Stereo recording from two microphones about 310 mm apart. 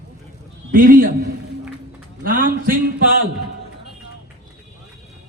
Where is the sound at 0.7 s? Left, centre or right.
Right.